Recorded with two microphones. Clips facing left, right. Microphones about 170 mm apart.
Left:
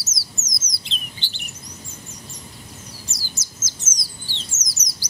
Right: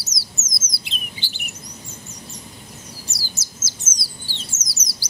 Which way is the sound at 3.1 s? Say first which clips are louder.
Right 1 dB; 10° right (ahead or behind).